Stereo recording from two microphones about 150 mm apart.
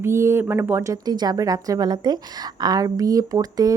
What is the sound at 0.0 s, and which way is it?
A woman's voice, 15° right (ahead or behind).